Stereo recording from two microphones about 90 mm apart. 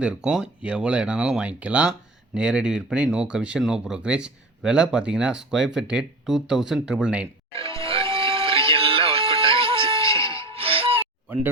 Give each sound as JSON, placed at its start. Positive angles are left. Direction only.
{"t": 0.0, "sound": "speech", "side_deg": -10}
{"t": 7.9, "sound": "music", "side_deg": -90}
{"t": 10.4, "sound": "music", "side_deg": -90}